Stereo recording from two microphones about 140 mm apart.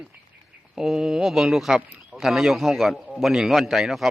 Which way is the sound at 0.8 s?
5° right (ahead or behind).